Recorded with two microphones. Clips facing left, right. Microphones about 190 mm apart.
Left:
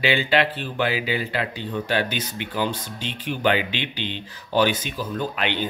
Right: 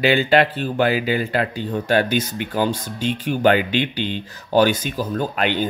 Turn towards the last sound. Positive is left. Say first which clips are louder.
# right 4 dB
turn(degrees=-45)  # may be behind; listen again after turning